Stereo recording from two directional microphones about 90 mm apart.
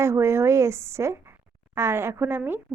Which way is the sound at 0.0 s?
30° right (ahead or behind).